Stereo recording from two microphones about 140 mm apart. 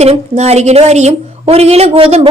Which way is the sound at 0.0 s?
50° right (ahead or behind).